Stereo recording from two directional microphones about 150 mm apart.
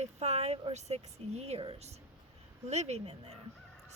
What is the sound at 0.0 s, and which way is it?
Speech, 45° right (ahead or behind).